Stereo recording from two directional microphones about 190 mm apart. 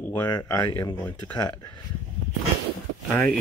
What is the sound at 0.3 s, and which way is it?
Speech, 20° left (ahead or behind).